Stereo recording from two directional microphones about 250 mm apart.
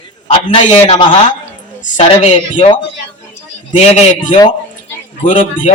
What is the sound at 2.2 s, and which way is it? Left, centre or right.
Speech, left.